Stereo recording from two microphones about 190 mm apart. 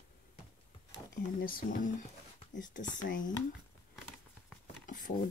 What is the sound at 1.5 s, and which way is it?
Speech, 45° left (ahead or behind).